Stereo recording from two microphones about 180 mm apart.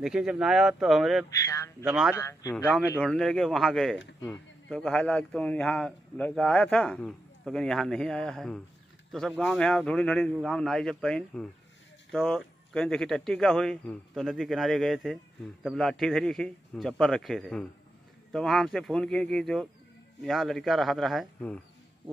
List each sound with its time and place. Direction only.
0.0 s speech: 5° right (ahead or behind)
1.4 s speech: 15° left (ahead or behind)
3.0 s speech: centre (ahead or behind)